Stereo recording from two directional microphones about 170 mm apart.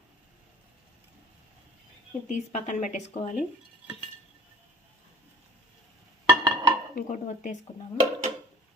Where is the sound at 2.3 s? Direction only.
45° left (ahead or behind).